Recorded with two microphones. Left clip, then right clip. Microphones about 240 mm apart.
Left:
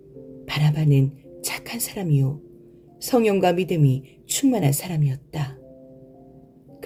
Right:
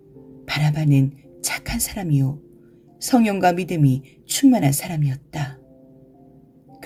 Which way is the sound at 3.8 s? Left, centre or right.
Right.